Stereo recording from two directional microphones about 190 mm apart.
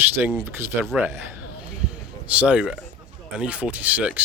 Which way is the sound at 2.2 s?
5° right (ahead or behind).